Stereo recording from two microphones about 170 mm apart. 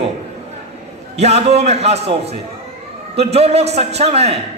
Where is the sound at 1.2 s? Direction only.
40° right (ahead or behind).